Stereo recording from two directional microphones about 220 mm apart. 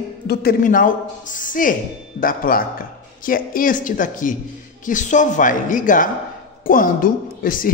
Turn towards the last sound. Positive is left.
turn(degrees=40)  # may be behind; listen again after turning